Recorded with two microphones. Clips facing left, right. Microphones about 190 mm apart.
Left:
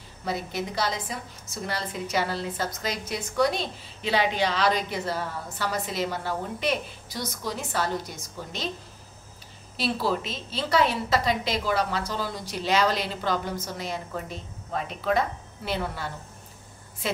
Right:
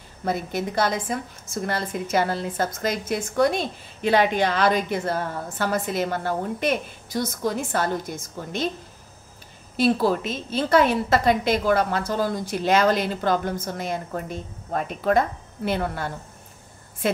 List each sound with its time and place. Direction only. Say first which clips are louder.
0.2 s a woman's voice: right 4 dB; 50° right (ahead or behind)
9.8 s a woman's voice: right 6 dB; 50° right (ahead or behind)